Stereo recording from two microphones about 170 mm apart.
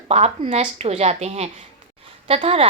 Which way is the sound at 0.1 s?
35° right (ahead or behind).